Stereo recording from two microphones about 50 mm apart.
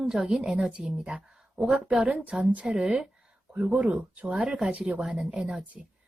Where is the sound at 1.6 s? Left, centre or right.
Centre.